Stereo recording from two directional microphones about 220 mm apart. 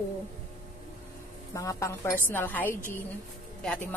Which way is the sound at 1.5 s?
15° left (ahead or behind).